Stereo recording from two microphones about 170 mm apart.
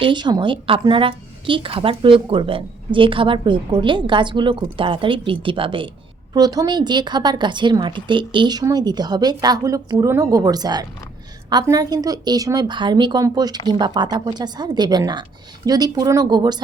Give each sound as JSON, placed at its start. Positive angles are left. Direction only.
{"t": 0.0, "sound": "a woman's voice", "side_deg": -25}